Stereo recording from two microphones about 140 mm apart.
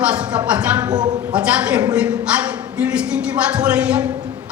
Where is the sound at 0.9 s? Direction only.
30° right (ahead or behind).